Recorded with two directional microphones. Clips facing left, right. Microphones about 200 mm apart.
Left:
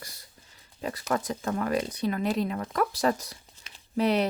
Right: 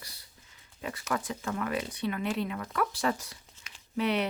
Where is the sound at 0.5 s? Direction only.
35° left (ahead or behind).